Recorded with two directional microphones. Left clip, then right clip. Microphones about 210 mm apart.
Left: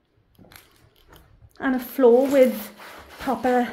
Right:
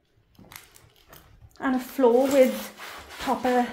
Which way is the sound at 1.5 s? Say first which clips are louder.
Left 2 dB; 20° left (ahead or behind).